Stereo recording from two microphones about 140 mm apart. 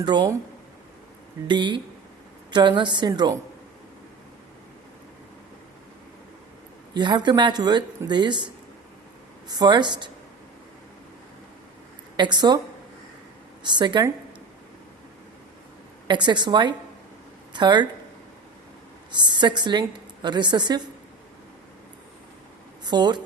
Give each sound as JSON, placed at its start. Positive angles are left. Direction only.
{"t": 0.0, "sound": "speech", "side_deg": -30}
{"t": 1.5, "sound": "speech", "side_deg": -35}
{"t": 6.9, "sound": "speech", "side_deg": -30}
{"t": 9.5, "sound": "speech", "side_deg": -30}
{"t": 12.1, "sound": "speech", "side_deg": -30}
{"t": 13.7, "sound": "speech", "side_deg": -30}
{"t": 16.0, "sound": "speech", "side_deg": -30}
{"t": 19.1, "sound": "speech", "side_deg": -30}
{"t": 22.8, "sound": "speech", "side_deg": -30}